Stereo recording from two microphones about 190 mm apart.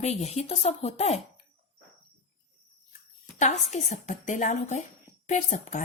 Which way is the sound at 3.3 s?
40° left (ahead or behind).